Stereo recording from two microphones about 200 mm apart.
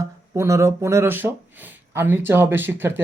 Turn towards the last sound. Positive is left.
turn(degrees=-10)  # may be behind; listen again after turning